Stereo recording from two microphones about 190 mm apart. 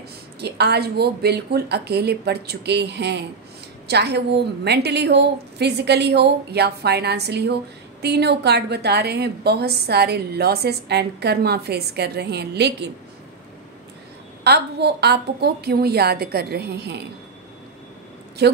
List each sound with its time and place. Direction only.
0.4 s a woman's voice: 60° right (ahead or behind)
14.4 s a woman's voice: 60° right (ahead or behind)
18.4 s a woman's voice: 60° right (ahead or behind)